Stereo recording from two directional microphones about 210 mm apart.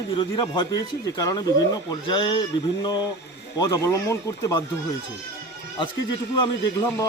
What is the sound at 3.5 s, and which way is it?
Speech, 15° left (ahead or behind).